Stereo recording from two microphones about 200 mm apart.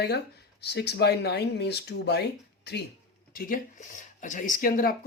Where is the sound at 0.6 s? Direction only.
55° left (ahead or behind).